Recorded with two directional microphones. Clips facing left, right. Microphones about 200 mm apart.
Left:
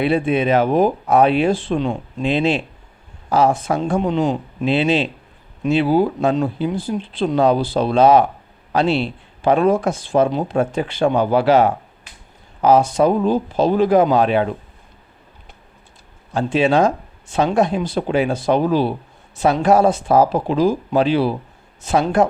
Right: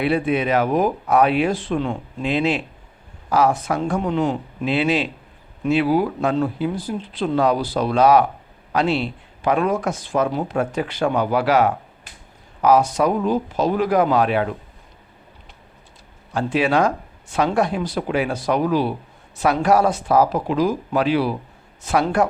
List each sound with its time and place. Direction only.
0.0 s speech: 25° left (ahead or behind)
16.3 s speech: 25° left (ahead or behind)